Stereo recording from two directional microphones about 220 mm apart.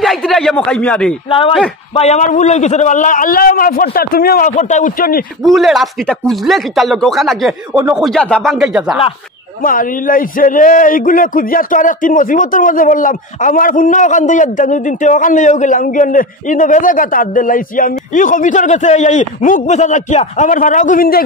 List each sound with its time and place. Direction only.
0.0 s speech: centre (ahead or behind)
2.0 s a man's voice: 30° left (ahead or behind)
5.4 s speech: centre (ahead or behind)
9.6 s a man's voice: 40° left (ahead or behind)